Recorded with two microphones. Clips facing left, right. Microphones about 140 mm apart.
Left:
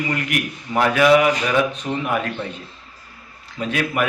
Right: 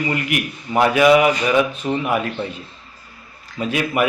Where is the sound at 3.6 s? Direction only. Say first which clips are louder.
Right 2 dB; 5° right (ahead or behind).